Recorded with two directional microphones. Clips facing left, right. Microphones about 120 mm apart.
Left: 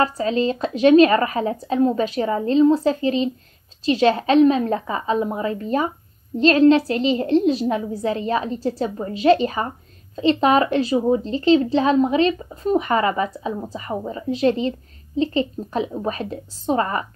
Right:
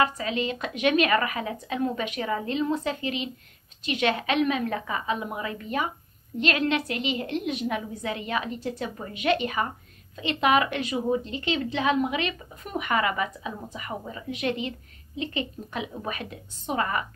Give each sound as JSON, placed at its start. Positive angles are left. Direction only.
{"t": 0.0, "sound": "a woman's voice", "side_deg": 35}